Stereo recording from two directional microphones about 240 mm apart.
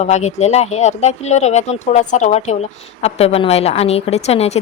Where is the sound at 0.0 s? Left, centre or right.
Left.